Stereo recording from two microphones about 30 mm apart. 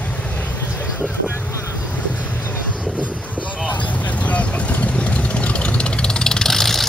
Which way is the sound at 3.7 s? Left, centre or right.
Left.